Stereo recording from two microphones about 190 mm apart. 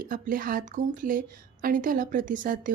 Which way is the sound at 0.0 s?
45° right (ahead or behind).